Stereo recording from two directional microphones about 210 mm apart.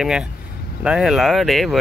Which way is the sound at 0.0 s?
5° right (ahead or behind).